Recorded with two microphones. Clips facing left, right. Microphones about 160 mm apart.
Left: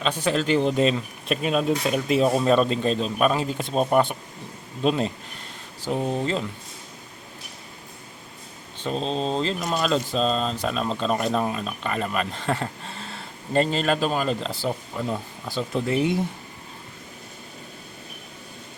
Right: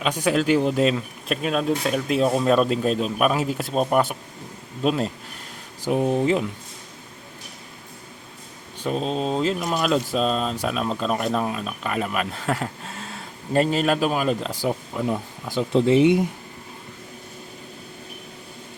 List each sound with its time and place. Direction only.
0.0 s speech: 10° right (ahead or behind)
5.8 s speech: 15° right (ahead or behind)
8.8 s speech: 10° right (ahead or behind)